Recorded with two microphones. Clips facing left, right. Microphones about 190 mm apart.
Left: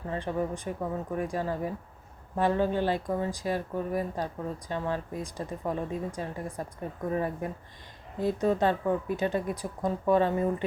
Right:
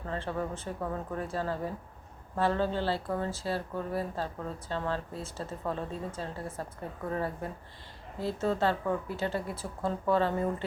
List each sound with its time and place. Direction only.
0.1 s speech: 15° left (ahead or behind)